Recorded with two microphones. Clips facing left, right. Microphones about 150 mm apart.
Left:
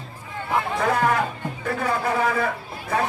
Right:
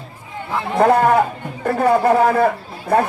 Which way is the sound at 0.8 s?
55° right (ahead or behind).